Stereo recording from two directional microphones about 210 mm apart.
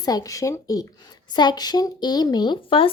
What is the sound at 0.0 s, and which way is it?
Speech, 15° left (ahead or behind).